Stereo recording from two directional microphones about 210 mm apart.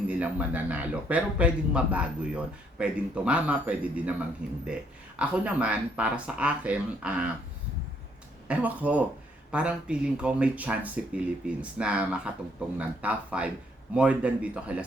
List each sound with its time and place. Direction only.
0.1 s a man's voice: 5° right (ahead or behind)
8.4 s a man's voice: 5° right (ahead or behind)